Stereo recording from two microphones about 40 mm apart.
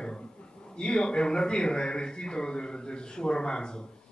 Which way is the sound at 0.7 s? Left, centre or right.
Left.